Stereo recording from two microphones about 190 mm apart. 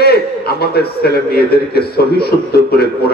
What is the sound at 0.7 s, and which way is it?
A man's voice, 55° left (ahead or behind).